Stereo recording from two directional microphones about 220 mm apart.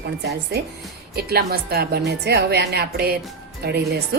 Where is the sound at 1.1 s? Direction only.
45° right (ahead or behind).